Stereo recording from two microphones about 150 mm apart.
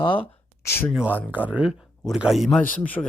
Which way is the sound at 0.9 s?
10° right (ahead or behind).